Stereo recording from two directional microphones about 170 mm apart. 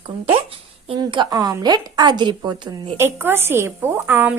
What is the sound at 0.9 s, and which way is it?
A woman's voice, 25° right (ahead or behind).